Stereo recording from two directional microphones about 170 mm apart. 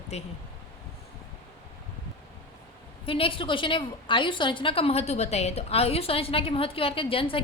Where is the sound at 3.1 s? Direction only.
30° left (ahead or behind).